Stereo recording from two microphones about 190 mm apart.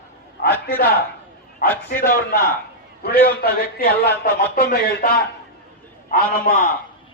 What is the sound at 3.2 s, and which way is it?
A man's voice, 50° left (ahead or behind).